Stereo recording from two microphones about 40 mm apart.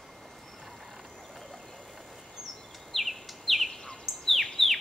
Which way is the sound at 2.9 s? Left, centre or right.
Centre.